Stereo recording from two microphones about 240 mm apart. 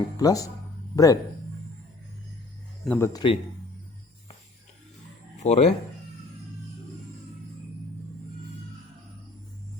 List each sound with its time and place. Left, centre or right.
0.2 s speech: centre
2.8 s speech: centre
5.4 s speech: left